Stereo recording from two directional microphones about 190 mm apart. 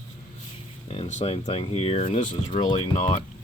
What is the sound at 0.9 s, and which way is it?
Speech, 30° left (ahead or behind).